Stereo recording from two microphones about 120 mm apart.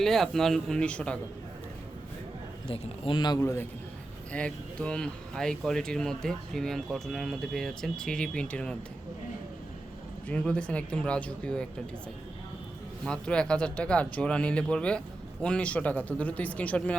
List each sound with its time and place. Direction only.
0.0 s speech: centre (ahead or behind)
2.6 s speech: 50° left (ahead or behind)
3.3 s a man's voice: 20° left (ahead or behind)
4.3 s speech: 10° left (ahead or behind)
10.2 s speech: 10° left (ahead or behind)
13.1 s speech: 10° left (ahead or behind)